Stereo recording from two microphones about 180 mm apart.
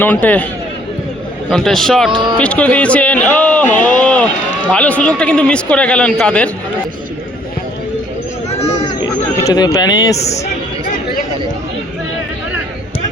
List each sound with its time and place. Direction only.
0.0 s speech: 10° left (ahead or behind)
1.5 s a man's voice: centre (ahead or behind)
2.0 s speech: 30° right (ahead or behind)
2.4 s speech: 5° left (ahead or behind)
8.4 s a sound: 35° left (ahead or behind)
9.4 s speech: 20° left (ahead or behind)
10.2 s speech: 40° left (ahead or behind)